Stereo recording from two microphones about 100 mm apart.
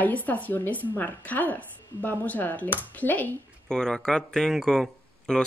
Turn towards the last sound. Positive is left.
turn(degrees=5)  # may be behind; listen again after turning